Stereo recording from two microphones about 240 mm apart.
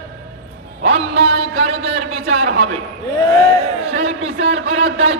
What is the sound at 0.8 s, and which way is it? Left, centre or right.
A man's voice, right.